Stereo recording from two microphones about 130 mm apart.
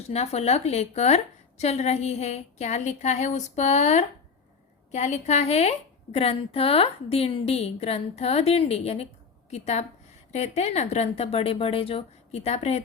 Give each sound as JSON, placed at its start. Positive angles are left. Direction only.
{"t": 0.1, "sound": "a woman's voice", "side_deg": 55}